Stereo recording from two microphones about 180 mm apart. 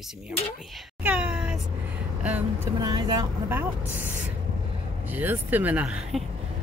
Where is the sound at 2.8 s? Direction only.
25° right (ahead or behind).